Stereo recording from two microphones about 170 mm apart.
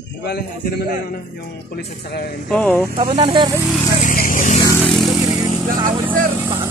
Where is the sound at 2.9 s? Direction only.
30° right (ahead or behind).